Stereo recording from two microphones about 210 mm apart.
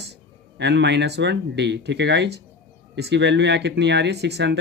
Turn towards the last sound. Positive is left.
turn(degrees=-55)  # may be behind; listen again after turning